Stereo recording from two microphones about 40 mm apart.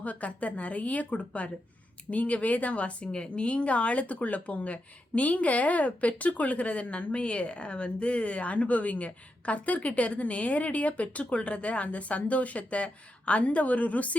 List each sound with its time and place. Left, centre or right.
0.0 s speech: left